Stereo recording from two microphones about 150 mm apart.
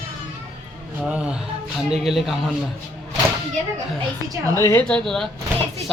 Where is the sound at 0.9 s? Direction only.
10° right (ahead or behind).